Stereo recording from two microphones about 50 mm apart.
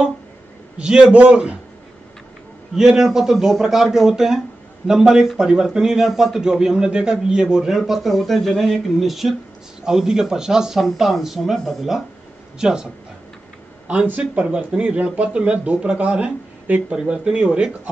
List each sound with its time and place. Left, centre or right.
0.7 s speech: centre
2.7 s a man's voice: centre
9.8 s speech: centre
12.5 s a man's voice: centre
14.0 s speech: right
14.8 s speech: right
16.9 s a man's voice: centre